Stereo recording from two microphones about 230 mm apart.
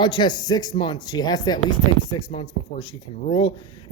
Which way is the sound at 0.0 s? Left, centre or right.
Centre.